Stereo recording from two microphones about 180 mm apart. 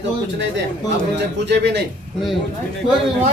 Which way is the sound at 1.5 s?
65° right (ahead or behind).